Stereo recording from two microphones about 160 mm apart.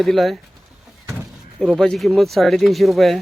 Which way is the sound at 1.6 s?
Centre (ahead or behind).